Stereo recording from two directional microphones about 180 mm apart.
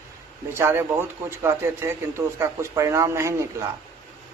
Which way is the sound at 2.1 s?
15° right (ahead or behind).